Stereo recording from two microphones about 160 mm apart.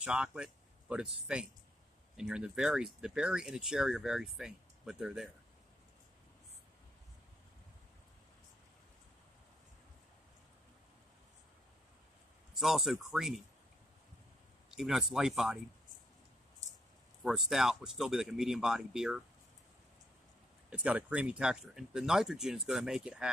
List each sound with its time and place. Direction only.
0.0 s speech: 5° right (ahead or behind)
12.5 s speech: centre (ahead or behind)
14.7 s speech: 5° right (ahead or behind)
17.2 s speech: centre (ahead or behind)
20.8 s speech: 10° right (ahead or behind)